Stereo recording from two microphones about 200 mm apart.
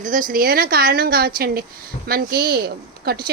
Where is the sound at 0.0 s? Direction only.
40° right (ahead or behind).